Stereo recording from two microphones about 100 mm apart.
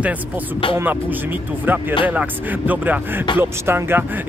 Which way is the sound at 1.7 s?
20° right (ahead or behind).